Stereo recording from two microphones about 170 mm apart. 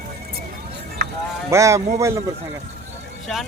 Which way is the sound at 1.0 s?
75° right (ahead or behind).